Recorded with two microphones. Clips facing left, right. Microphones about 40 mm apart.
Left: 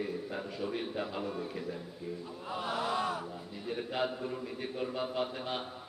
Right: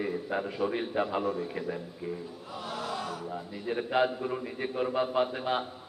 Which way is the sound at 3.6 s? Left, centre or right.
Right.